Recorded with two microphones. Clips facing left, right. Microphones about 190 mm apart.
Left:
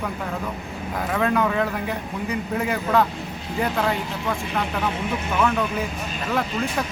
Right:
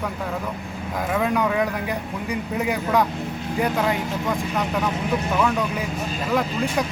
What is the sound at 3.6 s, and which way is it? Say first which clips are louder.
Speech: right 1 dB; 10° right (ahead or behind).